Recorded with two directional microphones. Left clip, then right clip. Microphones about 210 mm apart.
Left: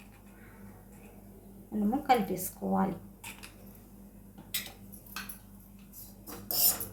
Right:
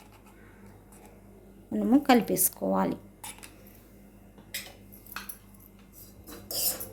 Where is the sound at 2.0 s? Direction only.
55° right (ahead or behind).